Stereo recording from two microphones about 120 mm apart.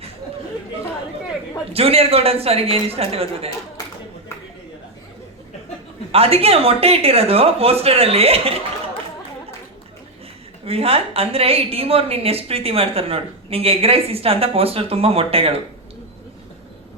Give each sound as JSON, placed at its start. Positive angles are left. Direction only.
{"t": 1.7, "sound": "speech", "side_deg": -55}
{"t": 6.1, "sound": "speech", "side_deg": -55}
{"t": 10.7, "sound": "a woman's voice", "side_deg": -55}